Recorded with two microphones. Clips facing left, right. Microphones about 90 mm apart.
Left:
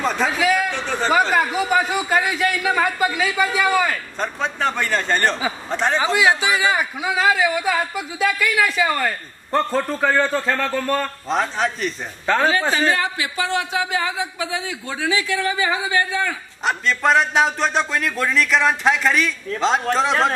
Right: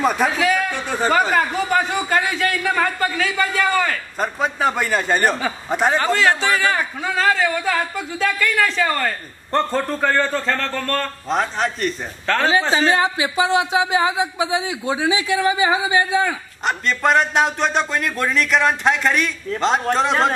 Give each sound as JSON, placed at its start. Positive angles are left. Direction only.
{"t": 0.0, "sound": "a man's voice", "side_deg": -10}
{"t": 0.4, "sound": "a man's voice", "side_deg": 5}
{"t": 0.7, "sound": "a man's voice", "side_deg": -15}
{"t": 1.3, "sound": "a man's voice", "side_deg": 5}
{"t": 4.2, "sound": "a man's voice", "side_deg": -5}
{"t": 5.9, "sound": "a man's voice", "side_deg": 10}
{"t": 12.3, "sound": "a man's voice", "side_deg": 10}
{"t": 12.7, "sound": "speech", "side_deg": -20}
{"t": 16.6, "sound": "a man's voice", "side_deg": 0}